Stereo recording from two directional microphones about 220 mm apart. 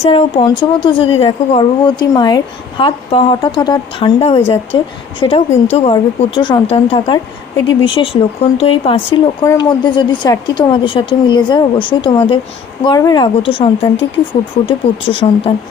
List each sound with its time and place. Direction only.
0.0 s a woman's voice: 25° left (ahead or behind)